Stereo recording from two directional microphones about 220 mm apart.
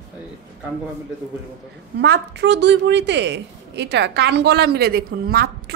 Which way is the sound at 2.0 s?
50° right (ahead or behind).